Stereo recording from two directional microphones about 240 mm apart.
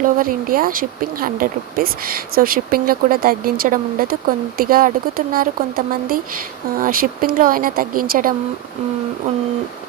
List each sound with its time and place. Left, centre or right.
0.2 s speech: right